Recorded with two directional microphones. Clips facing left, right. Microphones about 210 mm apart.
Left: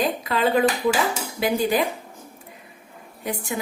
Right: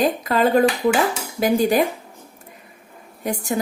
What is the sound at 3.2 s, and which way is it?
Speech, 40° right (ahead or behind).